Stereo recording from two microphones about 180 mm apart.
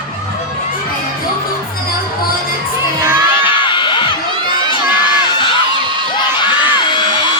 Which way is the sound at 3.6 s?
25° left (ahead or behind).